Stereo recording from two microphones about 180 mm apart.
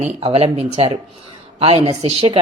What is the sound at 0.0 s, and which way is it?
Speech, 35° right (ahead or behind).